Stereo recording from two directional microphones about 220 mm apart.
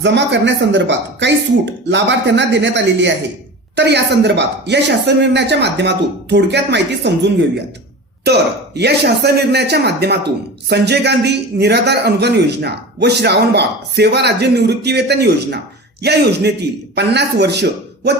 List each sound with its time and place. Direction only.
0.0 s a man's voice: 55° right (ahead or behind)
8.2 s a man's voice: 50° right (ahead or behind)